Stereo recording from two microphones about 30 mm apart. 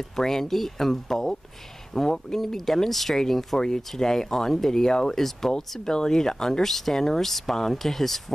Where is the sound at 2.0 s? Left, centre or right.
Centre.